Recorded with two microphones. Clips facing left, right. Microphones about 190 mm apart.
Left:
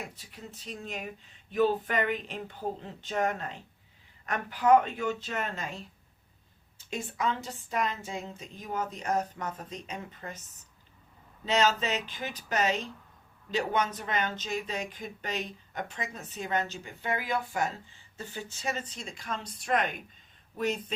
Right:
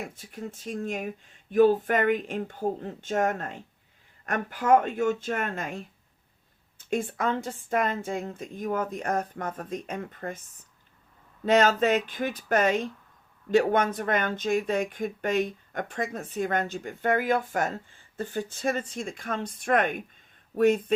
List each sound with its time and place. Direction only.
0.1 s speech: 50° right (ahead or behind)
11.4 s speech: 55° right (ahead or behind)